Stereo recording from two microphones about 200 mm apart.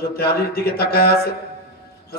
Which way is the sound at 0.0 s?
50° left (ahead or behind).